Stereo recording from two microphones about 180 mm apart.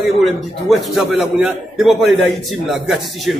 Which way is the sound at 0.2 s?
Centre (ahead or behind).